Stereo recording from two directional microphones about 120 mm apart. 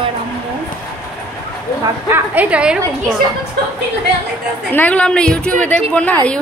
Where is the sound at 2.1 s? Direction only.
15° right (ahead or behind).